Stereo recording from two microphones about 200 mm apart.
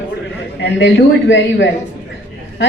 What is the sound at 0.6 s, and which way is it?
A man's voice, 65° left (ahead or behind).